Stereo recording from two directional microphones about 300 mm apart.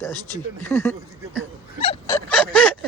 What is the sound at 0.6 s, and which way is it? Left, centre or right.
Speech, centre.